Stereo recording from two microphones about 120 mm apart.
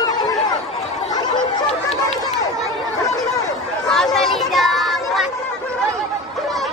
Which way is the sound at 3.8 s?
5° left (ahead or behind).